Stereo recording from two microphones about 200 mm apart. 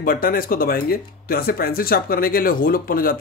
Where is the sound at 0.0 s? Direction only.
45° left (ahead or behind).